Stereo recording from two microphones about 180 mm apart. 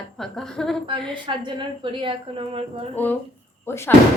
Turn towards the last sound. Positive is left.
turn(degrees=15)  # may be behind; listen again after turning